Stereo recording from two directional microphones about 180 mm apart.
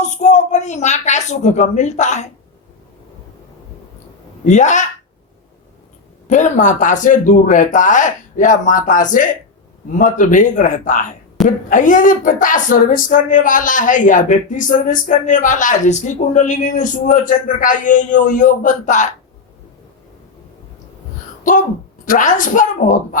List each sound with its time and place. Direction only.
0.0 s a woman's voice: 40° left (ahead or behind)
4.4 s speech: 40° left (ahead or behind)
6.2 s speech: 45° left (ahead or behind)
22.0 s speech: 45° left (ahead or behind)